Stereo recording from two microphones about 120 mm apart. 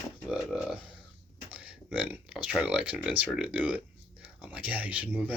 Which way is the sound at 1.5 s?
10° right (ahead or behind).